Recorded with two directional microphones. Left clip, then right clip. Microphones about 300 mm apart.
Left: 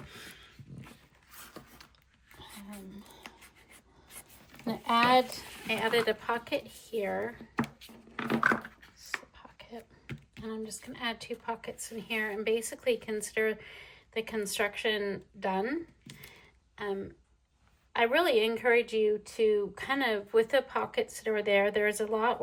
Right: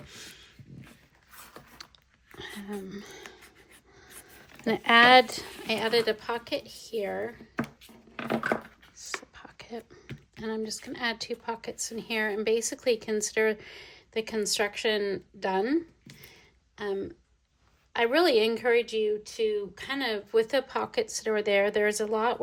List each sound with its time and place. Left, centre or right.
0.0 s dog: centre
1.4 s mechanisms: centre
4.6 s speech: right
5.5 s a sound: centre
9.0 s chopping: centre
10.4 s a woman's voice: centre